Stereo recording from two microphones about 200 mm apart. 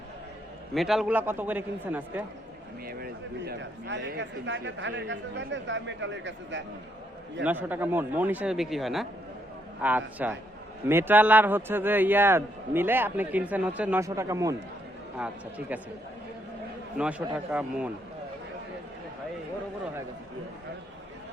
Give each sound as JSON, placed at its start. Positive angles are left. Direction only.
{"t": 0.7, "sound": "speech", "side_deg": 0}
{"t": 2.8, "sound": "speech", "side_deg": -50}
{"t": 7.4, "sound": "speech", "side_deg": -10}
{"t": 17.0, "sound": "a man's voice", "side_deg": -5}